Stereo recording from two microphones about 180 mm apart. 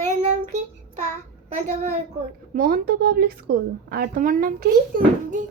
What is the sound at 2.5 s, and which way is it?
A woman's voice, 55° right (ahead or behind).